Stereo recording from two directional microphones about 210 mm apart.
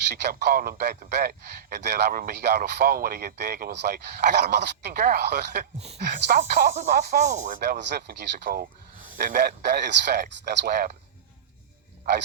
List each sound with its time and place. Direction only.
0.1 s speech: 50° right (ahead or behind); by 7.6 s 35° right (ahead or behind)
7.6 s speech: 55° right (ahead or behind)